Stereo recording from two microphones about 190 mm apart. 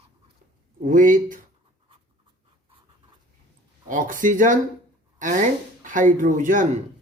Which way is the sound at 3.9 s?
45° right (ahead or behind).